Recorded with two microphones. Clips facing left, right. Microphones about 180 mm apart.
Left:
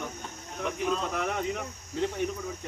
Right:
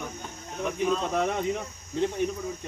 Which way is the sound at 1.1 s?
20° right (ahead or behind).